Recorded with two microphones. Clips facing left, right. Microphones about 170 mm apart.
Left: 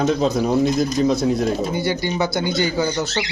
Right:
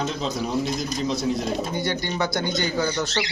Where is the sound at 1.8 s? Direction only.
5° left (ahead or behind).